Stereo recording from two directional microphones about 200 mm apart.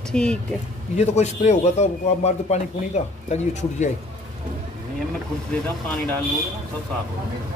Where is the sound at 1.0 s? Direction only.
35° left (ahead or behind).